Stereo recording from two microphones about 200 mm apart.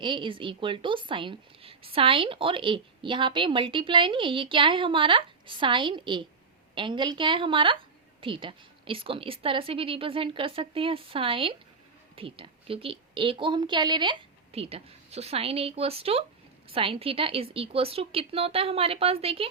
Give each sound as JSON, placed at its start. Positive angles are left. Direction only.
{"t": 0.0, "sound": "a woman's voice", "side_deg": -25}